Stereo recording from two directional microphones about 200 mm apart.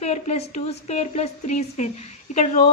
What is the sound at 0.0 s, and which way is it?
A woman's voice, 35° left (ahead or behind).